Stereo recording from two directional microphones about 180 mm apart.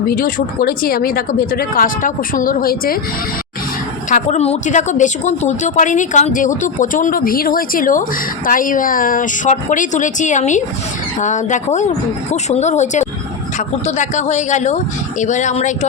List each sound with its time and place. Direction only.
0.1 s a woman's voice: 50° left (ahead or behind)
4.1 s a woman's voice: 40° left (ahead or behind)